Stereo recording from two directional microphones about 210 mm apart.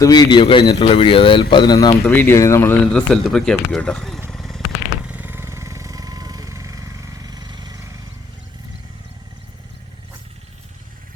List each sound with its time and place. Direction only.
0.0 s a man's voice: 20° left (ahead or behind); by 4.2 s 5° left (ahead or behind)
4.3 s vehicle: centre (ahead or behind); by 7.8 s 20° right (ahead or behind)